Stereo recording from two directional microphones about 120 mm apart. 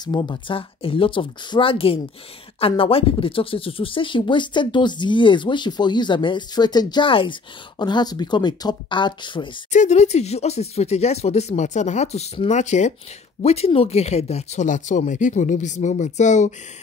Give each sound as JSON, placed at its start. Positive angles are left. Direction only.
{"t": 0.0, "sound": "speech", "side_deg": 35}
{"t": 9.7, "sound": "speech", "side_deg": 75}
{"t": 13.4, "sound": "speech", "side_deg": 60}